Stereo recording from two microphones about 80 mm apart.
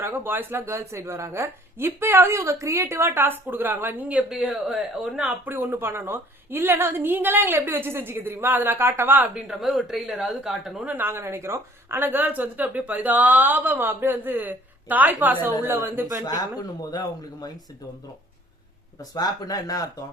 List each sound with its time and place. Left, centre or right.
0.0 s a woman's voice: right
4.3 s speech: centre
5.5 s speech: right
9.3 s speech: centre
10.8 s speech: right
16.2 s speech: left
19.1 s speech: left